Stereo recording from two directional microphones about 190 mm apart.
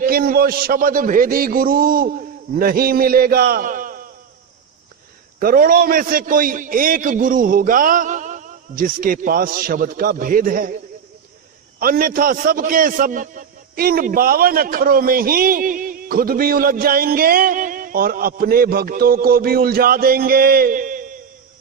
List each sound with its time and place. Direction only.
0.0 s a man's voice: 50° right (ahead or behind)
5.4 s a man's voice: 50° right (ahead or behind)
11.8 s a man's voice: 50° right (ahead or behind)